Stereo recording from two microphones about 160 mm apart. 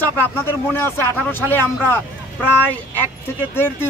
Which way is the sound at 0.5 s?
15° left (ahead or behind).